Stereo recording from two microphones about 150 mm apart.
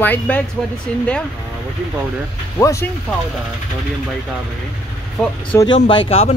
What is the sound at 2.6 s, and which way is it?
Speech, 20° left (ahead or behind).